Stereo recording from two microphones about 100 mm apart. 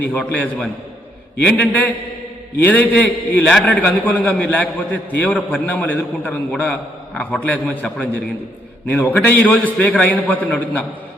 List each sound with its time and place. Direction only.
0.0 s a man's voice: 15° left (ahead or behind)
8.9 s a man's voice: 20° left (ahead or behind)